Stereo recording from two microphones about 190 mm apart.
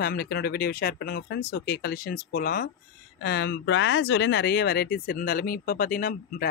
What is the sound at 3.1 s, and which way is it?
Speech, 60° left (ahead or behind).